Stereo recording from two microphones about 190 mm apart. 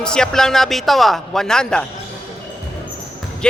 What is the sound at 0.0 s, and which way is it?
A man's voice, 5° left (ahead or behind).